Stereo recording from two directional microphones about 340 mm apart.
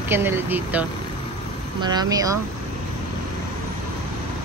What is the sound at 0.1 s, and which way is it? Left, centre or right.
Speech, centre.